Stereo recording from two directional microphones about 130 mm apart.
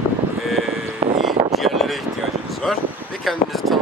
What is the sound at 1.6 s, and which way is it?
Vehicle, centre (ahead or behind).